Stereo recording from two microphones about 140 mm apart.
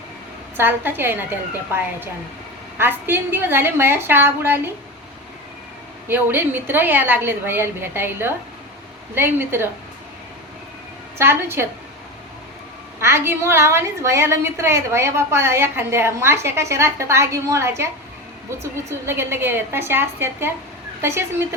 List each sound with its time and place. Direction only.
0.5 s a woman's voice: 15° right (ahead or behind)
6.1 s a woman's voice: 15° right (ahead or behind)
11.2 s a woman's voice: 15° right (ahead or behind)
13.0 s a woman's voice: 15° right (ahead or behind)